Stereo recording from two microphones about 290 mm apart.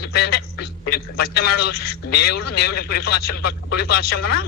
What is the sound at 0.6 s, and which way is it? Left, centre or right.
A man's voice, left.